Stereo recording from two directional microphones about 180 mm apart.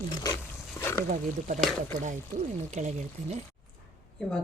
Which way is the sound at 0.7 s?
15° left (ahead or behind).